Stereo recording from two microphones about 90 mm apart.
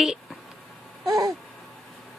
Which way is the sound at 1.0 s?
40° right (ahead or behind).